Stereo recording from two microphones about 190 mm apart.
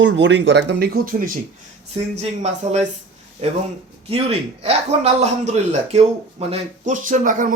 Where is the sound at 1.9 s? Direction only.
35° right (ahead or behind).